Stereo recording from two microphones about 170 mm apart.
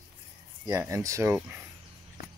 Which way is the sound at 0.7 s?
20° right (ahead or behind).